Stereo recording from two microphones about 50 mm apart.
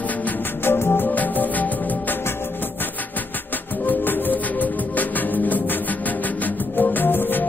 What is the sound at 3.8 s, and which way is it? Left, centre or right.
Music, left.